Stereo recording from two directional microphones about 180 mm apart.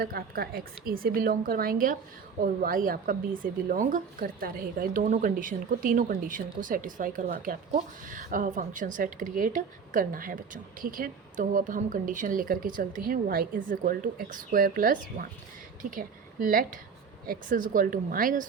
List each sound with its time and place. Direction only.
0.0 s a woman's voice: 55° right (ahead or behind)